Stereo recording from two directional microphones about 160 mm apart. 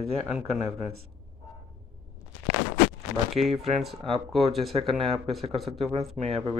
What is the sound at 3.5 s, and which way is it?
Speech, 40° right (ahead or behind).